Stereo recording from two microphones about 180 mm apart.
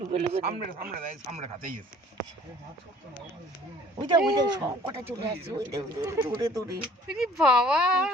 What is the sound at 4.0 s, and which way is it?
Speech, 25° right (ahead or behind).